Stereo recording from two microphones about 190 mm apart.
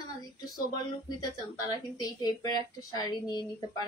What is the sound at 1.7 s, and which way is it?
Speech, 20° left (ahead or behind).